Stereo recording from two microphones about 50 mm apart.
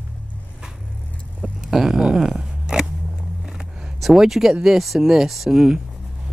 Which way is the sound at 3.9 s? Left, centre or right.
Centre.